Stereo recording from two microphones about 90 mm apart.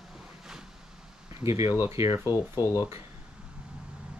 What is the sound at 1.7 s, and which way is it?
Speech, 30° right (ahead or behind).